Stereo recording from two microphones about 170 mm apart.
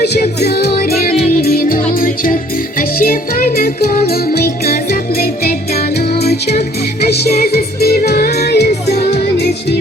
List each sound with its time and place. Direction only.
0.0 s music: 70° left (ahead or behind)
7.0 s music: 70° left (ahead or behind)